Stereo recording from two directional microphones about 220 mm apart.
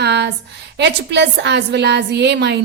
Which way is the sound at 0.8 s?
50° right (ahead or behind).